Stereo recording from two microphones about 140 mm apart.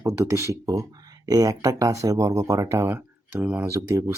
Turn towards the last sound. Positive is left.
turn(degrees=-20)  # may be behind; listen again after turning